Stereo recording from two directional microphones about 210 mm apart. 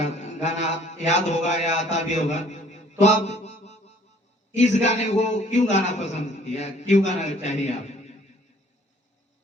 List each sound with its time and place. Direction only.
0.0 s mantra: 35° left (ahead or behind)
4.5 s a man's voice: 30° left (ahead or behind)